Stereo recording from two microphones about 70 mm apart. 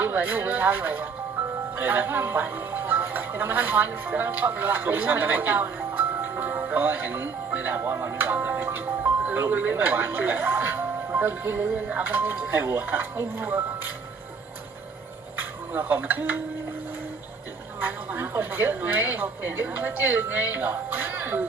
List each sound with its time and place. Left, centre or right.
0.0 s speech: right
8.3 s music: right
9.2 s speech: right
11.7 s speech: centre
12.0 s speech: right
15.7 s speech: right
17.7 s speech: right